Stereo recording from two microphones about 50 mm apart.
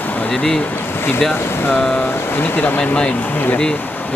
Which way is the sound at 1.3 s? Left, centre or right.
Left.